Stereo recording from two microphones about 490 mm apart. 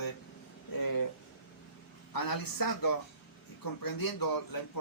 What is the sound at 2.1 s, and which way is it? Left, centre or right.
Speech, left.